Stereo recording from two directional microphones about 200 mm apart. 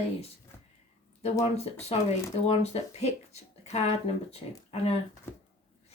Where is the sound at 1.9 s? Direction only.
30° left (ahead or behind).